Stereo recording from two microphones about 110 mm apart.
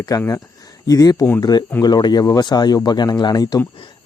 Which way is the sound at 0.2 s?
30° left (ahead or behind).